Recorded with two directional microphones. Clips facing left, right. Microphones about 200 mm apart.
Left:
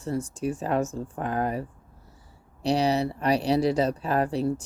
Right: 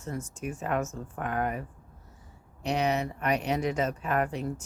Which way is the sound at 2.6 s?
35° left (ahead or behind).